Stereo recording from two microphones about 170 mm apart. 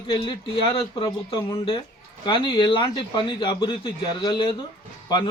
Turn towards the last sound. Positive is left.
turn(degrees=25)  # may be behind; listen again after turning